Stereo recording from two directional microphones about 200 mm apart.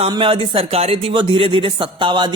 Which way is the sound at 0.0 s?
25° right (ahead or behind).